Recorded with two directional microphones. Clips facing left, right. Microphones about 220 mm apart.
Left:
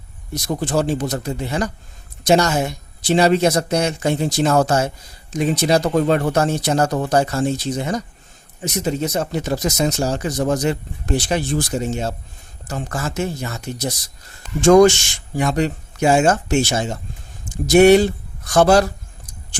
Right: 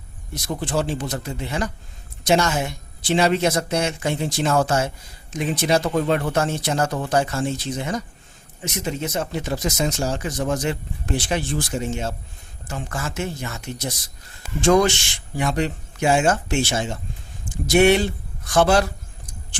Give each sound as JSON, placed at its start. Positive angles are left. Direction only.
{"t": 0.4, "sound": "speech", "side_deg": 45}